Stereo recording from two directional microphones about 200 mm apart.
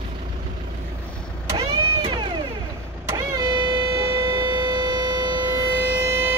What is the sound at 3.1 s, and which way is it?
Vehicle, 15° right (ahead or behind).